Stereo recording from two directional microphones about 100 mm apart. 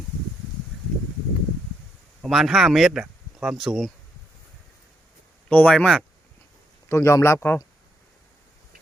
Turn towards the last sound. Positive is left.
turn(degrees=25)  # may be behind; listen again after turning